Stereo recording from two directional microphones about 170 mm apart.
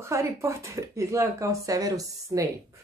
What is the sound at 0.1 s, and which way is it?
Speech, 15° right (ahead or behind).